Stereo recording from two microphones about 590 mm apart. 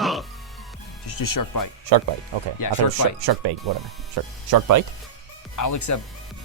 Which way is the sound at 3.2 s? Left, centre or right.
Right.